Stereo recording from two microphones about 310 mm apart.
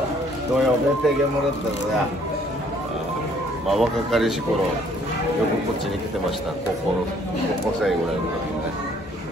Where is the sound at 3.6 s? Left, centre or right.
Centre.